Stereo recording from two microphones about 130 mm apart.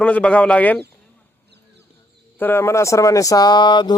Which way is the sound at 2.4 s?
20° left (ahead or behind).